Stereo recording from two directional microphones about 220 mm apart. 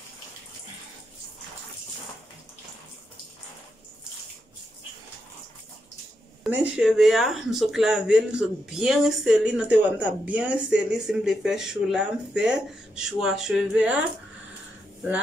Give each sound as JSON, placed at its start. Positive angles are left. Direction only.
{"t": 6.4, "sound": "speech", "side_deg": -5}